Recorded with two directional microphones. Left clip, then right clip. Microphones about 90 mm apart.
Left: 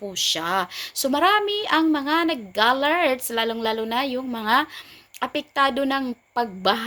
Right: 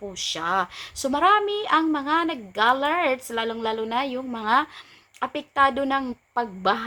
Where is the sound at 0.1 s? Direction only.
20° left (ahead or behind).